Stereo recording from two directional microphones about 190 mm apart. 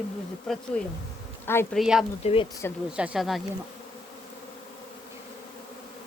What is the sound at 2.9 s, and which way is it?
Speech, 5° right (ahead or behind).